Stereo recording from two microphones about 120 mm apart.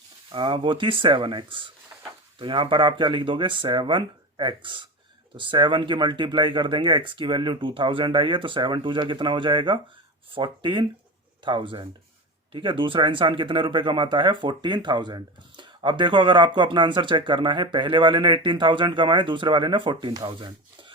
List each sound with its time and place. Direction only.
0.3 s speech: 45° right (ahead or behind)